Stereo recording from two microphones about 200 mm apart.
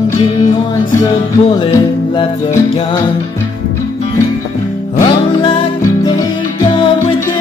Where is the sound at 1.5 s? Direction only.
25° left (ahead or behind).